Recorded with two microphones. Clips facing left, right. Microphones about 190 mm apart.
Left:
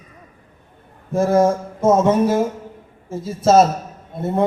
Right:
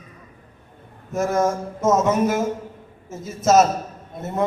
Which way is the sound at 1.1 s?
30° left (ahead or behind).